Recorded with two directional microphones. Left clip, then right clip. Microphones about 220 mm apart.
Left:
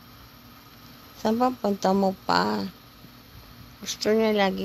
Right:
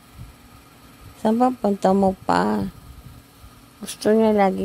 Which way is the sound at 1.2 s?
25° right (ahead or behind).